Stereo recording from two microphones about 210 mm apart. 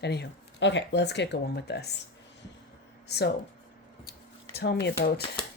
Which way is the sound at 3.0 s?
50° left (ahead or behind).